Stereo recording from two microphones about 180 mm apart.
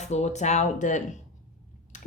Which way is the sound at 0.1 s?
40° left (ahead or behind).